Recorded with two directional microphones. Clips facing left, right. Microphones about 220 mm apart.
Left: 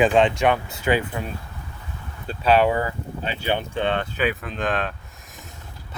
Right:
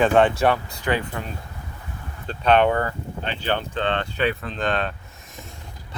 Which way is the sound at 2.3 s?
5° left (ahead or behind).